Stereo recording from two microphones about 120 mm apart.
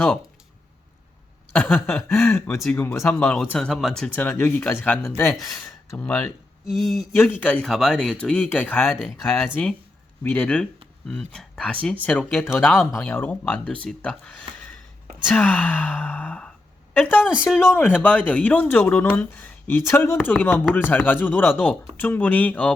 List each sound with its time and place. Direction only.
1.5 s speech: 15° left (ahead or behind)
3.7 s speech: centre (ahead or behind)
4.1 s speech: 15° left (ahead or behind)
6.7 s speech: centre (ahead or behind)
7.2 s speech: 15° left (ahead or behind)
8.8 s speech: centre (ahead or behind)
10.2 s speech: 10° left (ahead or behind)
12.6 s speech: centre (ahead or behind)
13.0 s speech: 15° left (ahead or behind)